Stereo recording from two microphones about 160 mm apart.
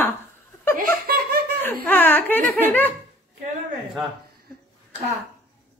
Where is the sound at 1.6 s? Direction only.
10° left (ahead or behind).